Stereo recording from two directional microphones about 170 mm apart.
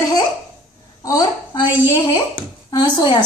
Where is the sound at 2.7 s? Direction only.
25° left (ahead or behind).